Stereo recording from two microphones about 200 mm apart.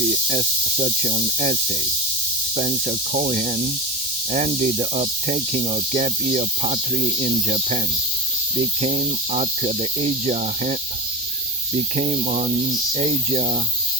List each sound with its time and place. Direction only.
0.1 s speech: 35° right (ahead or behind)
2.6 s speech: 35° right (ahead or behind)